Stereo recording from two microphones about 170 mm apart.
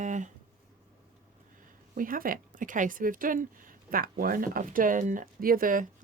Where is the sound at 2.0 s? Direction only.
55° right (ahead or behind).